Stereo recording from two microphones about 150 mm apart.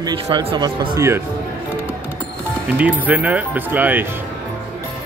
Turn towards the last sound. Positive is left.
turn(degrees=-10)  # may be behind; listen again after turning